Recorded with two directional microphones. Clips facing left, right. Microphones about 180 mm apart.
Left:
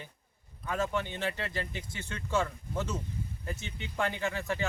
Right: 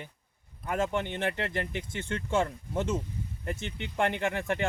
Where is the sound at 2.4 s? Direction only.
25° right (ahead or behind).